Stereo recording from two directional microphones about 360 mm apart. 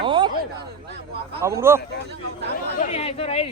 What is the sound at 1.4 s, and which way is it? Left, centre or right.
Speech, centre.